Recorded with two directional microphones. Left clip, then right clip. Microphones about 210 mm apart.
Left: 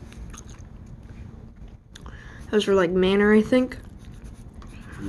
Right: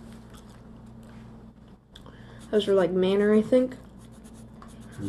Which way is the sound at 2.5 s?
30° left (ahead or behind).